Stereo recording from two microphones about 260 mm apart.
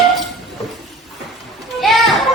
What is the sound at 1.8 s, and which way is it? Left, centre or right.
Children playing, centre.